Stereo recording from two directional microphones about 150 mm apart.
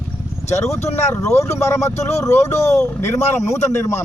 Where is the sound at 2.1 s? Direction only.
20° left (ahead or behind).